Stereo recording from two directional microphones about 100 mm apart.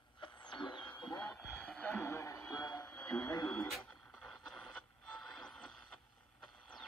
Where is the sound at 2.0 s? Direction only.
30° left (ahead or behind).